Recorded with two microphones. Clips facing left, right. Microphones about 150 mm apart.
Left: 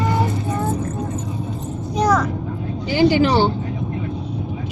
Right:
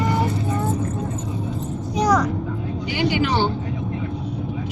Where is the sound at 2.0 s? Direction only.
15° right (ahead or behind).